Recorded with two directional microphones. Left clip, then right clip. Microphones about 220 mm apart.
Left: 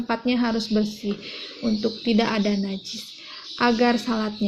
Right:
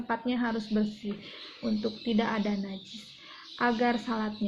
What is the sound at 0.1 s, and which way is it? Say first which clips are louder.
A woman's voice: left 7 dB; 35° left (ahead or behind).